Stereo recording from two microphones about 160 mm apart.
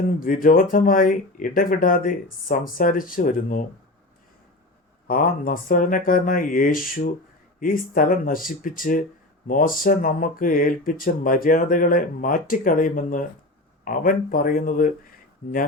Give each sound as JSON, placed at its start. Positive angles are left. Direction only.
{"t": 0.2, "sound": "speech", "side_deg": 60}
{"t": 5.0, "sound": "speech", "side_deg": 60}